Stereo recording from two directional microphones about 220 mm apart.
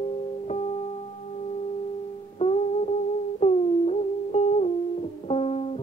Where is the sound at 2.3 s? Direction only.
25° left (ahead or behind).